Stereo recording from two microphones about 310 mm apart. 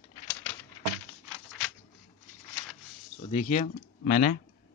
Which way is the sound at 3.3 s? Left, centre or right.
Left.